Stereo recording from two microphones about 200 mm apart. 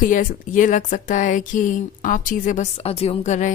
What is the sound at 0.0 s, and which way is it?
Speech, 40° left (ahead or behind).